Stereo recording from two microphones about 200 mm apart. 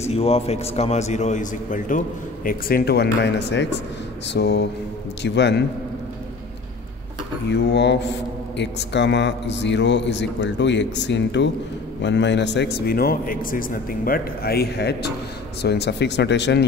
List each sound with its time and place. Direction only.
0.0 s a man's voice: 30° left (ahead or behind); by 5.6 s 60° left (ahead or behind)
7.4 s a man's voice: 60° left (ahead or behind)